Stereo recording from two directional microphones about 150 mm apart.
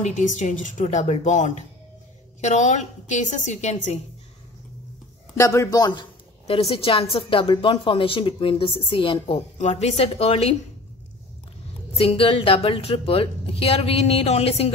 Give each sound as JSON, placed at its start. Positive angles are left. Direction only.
{"t": 0.0, "sound": "a woman's voice", "side_deg": 55}
{"t": 5.4, "sound": "a woman's voice", "side_deg": 20}
{"t": 9.6, "sound": "a woman's voice", "side_deg": 50}
{"t": 11.9, "sound": "a woman's voice", "side_deg": 40}